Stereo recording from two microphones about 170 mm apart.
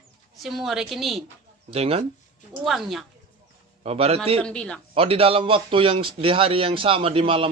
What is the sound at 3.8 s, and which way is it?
Speech, 35° right (ahead or behind).